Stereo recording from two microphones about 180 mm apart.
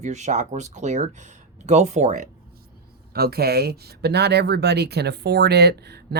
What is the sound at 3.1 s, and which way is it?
Speech, 60° right (ahead or behind).